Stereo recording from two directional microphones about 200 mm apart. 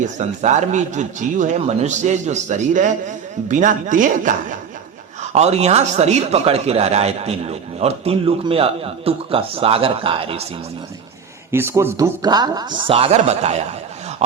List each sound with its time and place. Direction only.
0.0 s speech: 35° right (ahead or behind)
11.5 s speech: 10° right (ahead or behind); by 14.4 s 30° right (ahead or behind)